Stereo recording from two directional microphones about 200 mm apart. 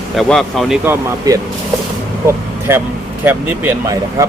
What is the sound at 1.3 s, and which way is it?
Speech, 15° right (ahead or behind).